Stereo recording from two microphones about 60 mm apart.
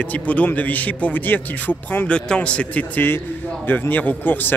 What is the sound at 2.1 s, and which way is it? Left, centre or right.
A man's voice, centre.